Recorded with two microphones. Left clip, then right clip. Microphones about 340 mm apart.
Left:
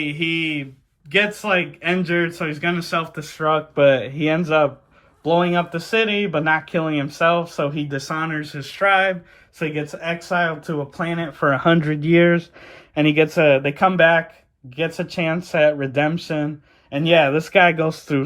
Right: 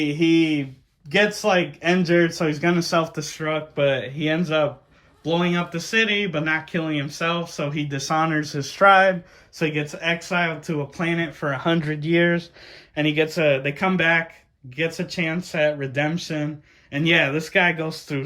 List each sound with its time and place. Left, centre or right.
0.1 s speech: centre
9.6 s speech: centre
11.4 s speech: centre